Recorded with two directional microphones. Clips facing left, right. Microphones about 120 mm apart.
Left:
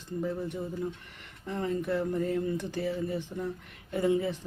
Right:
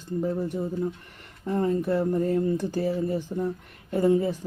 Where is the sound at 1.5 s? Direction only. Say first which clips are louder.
Right 6 dB; 40° right (ahead or behind).